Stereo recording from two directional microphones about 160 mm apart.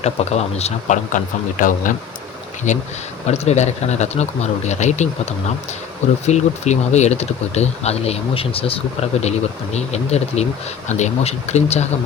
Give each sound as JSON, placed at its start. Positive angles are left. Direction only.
{"t": 0.0, "sound": "speech", "side_deg": 40}